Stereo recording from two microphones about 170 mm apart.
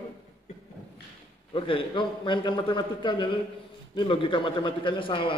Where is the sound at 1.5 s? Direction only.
30° left (ahead or behind).